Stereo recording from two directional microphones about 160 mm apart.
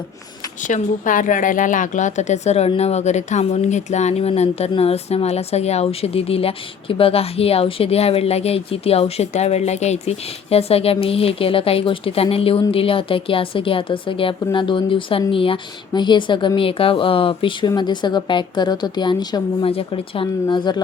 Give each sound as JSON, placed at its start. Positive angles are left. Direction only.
{"t": 0.7, "sound": "a woman's voice", "side_deg": 55}